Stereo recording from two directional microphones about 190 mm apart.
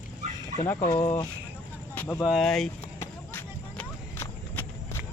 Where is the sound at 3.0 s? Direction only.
10° left (ahead or behind).